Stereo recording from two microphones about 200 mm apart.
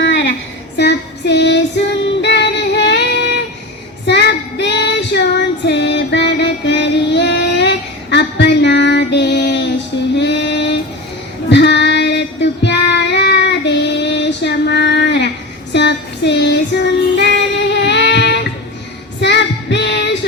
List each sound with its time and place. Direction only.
0.0 s a sound: 65° left (ahead or behind)
0.8 s child singing: 55° left (ahead or behind)
2.2 s music: 60° left (ahead or behind)
4.0 s child singing: 55° left (ahead or behind)